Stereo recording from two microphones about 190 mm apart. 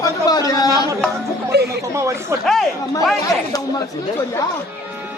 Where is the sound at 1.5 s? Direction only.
60° right (ahead or behind).